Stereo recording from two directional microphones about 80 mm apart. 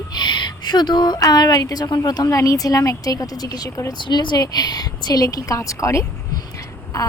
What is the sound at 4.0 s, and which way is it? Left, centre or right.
Speech, left.